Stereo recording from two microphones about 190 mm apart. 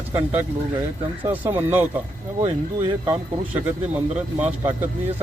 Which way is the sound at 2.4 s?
30° right (ahead or behind).